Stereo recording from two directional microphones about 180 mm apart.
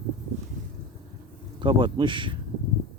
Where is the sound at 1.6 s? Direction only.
25° right (ahead or behind).